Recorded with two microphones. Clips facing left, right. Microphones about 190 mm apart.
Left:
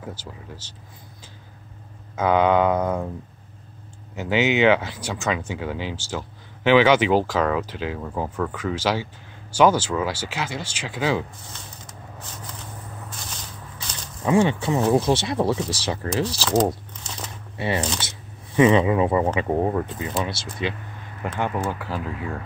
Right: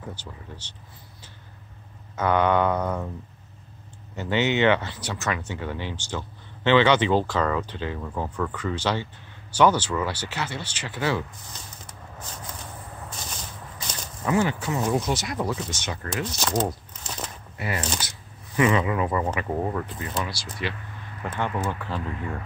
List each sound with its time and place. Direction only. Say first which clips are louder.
0.2 s speech: left 2 dB; 90° left
2.1 s speech: left 3 dB; 10° left (ahead or behind)
4.1 s speech: left 3 dB; 10° left (ahead or behind)
14.2 s speech: left 4 dB; 25° left (ahead or behind)
17.6 s speech: left 5 dB; 25° left (ahead or behind)
21.2 s speech: left 2 dB; 10° left (ahead or behind)